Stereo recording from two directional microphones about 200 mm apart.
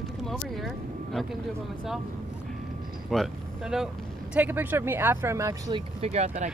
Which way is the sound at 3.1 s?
Centre (ahead or behind).